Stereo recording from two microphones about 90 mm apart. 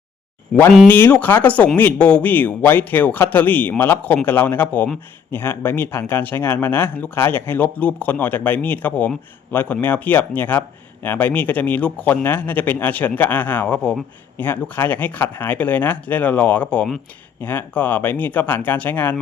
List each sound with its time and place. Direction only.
0.9 s speech: 25° left (ahead or behind)
14.3 s speech: 20° left (ahead or behind)
17.4 s speech: 20° left (ahead or behind)